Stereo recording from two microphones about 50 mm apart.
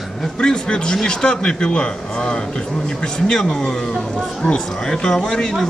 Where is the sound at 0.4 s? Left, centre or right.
Centre.